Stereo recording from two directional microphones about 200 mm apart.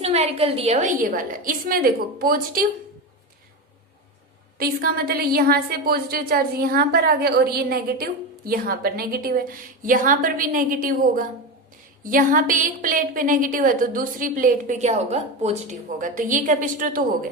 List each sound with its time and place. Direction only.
0.0 s a woman's voice: 30° right (ahead or behind)
4.5 s a woman's voice: 50° right (ahead or behind)